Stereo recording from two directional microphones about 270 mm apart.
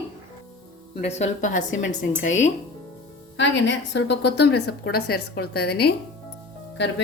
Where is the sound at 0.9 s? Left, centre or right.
Left.